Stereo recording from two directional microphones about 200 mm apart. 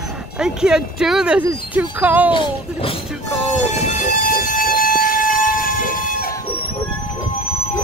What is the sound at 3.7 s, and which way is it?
Train, 35° left (ahead or behind).